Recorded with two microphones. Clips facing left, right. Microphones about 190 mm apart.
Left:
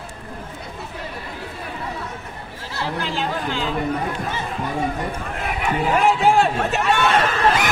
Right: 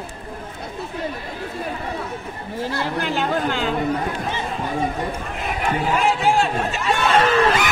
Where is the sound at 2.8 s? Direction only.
55° right (ahead or behind).